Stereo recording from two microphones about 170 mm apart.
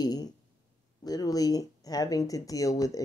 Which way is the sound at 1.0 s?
20° left (ahead or behind).